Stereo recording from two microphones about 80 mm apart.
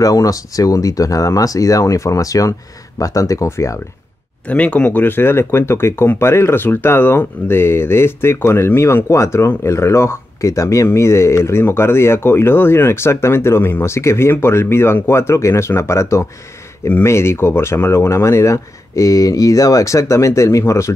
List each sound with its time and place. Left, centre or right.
0.0 s speech: left
4.5 s speech: centre; by 20.9 s left